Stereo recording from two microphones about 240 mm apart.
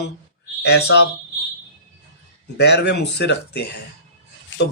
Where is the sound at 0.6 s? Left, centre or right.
Left.